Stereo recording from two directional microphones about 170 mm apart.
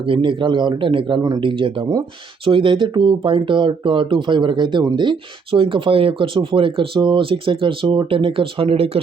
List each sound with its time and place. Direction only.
0.0 s speech: 30° right (ahead or behind)